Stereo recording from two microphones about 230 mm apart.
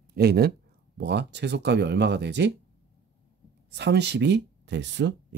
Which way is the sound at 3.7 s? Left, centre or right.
Right.